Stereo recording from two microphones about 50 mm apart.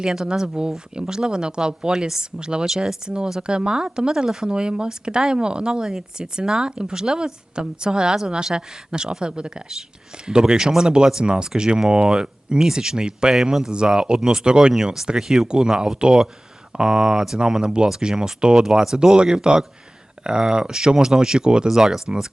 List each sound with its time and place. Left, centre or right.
0.0 s speech: centre